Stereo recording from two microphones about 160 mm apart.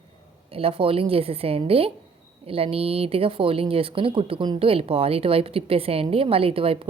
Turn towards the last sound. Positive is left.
turn(degrees=-35)  # may be behind; listen again after turning